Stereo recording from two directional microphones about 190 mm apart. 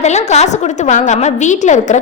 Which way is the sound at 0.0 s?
35° left (ahead or behind).